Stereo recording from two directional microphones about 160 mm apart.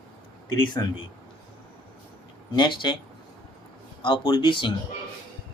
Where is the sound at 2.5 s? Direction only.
30° left (ahead or behind).